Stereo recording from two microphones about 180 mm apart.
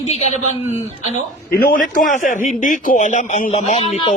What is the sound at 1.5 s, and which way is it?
Speech, 55° left (ahead or behind).